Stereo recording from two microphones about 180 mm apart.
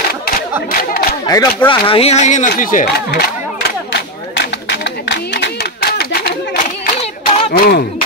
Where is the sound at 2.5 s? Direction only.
50° left (ahead or behind); by 5.5 s 70° left (ahead or behind).